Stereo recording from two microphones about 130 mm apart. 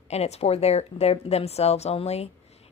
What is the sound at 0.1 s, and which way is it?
A woman's voice, 55° left (ahead or behind).